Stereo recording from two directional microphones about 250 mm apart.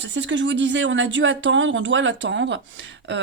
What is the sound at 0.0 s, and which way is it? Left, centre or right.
Speech, right.